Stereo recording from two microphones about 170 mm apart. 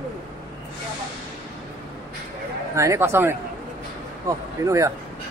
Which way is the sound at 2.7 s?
15° right (ahead or behind).